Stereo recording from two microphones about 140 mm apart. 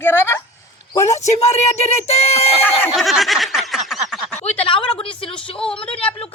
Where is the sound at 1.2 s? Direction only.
50° left (ahead or behind).